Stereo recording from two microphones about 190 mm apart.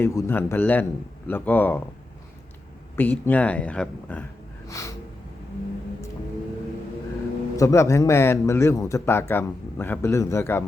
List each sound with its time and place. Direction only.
0.0 s speech: 15° left (ahead or behind)
2.9 s speech: 10° left (ahead or behind)
7.5 s speech: 15° left (ahead or behind)